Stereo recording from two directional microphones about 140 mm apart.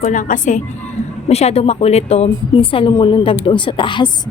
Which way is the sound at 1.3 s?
50° left (ahead or behind).